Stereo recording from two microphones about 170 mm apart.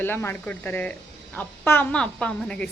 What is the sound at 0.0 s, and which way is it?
A woman's voice, 10° left (ahead or behind).